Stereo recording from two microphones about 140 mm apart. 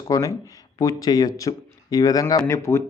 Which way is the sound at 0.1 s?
25° left (ahead or behind).